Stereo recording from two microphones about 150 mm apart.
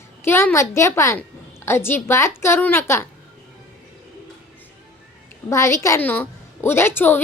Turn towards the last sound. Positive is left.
turn(degrees=15)  # may be behind; listen again after turning